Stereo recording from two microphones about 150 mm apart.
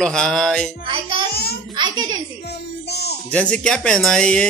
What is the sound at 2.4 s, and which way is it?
Music, 90° left.